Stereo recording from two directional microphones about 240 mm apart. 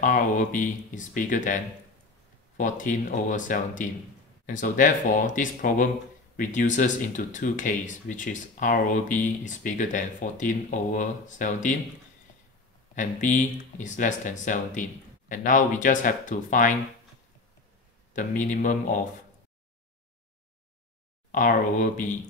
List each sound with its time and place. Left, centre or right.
0.0 s speech: left
12.9 s speech: left
18.1 s speech: left
21.3 s speech: left